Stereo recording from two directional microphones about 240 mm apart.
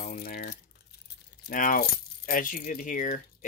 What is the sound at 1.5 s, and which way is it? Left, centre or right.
Speech, left.